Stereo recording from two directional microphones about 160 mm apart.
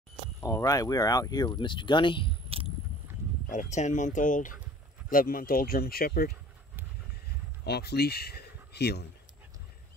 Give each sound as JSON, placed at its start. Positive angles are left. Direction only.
{"t": 0.4, "sound": "speech", "side_deg": 20}
{"t": 3.4, "sound": "speech", "side_deg": 50}
{"t": 7.6, "sound": "speech", "side_deg": 90}